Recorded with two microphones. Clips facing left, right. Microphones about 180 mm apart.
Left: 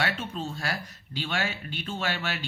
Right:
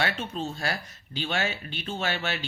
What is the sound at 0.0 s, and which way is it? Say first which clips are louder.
Speech: right 1 dB; 25° right (ahead or behind).